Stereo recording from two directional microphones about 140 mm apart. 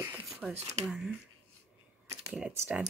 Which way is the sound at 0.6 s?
50° right (ahead or behind).